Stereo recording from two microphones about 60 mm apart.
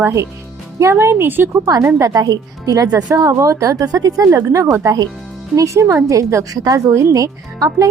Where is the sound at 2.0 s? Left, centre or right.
Right.